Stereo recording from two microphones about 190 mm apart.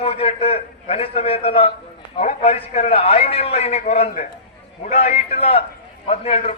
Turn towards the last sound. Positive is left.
turn(degrees=35)  # may be behind; listen again after turning